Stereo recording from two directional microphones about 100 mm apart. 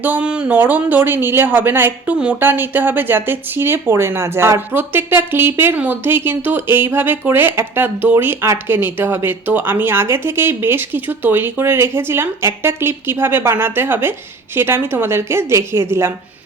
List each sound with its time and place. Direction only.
0.0 s speech: 15° right (ahead or behind)